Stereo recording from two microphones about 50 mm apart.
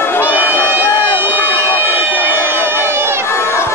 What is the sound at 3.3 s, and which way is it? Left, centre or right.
Crowd, left.